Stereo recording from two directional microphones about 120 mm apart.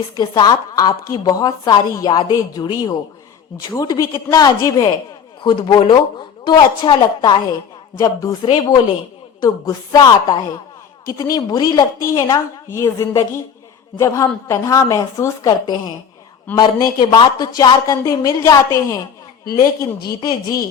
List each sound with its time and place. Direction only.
0.2 s a woman's voice: 35° left (ahead or behind)
5.4 s a woman's voice: 40° left (ahead or behind)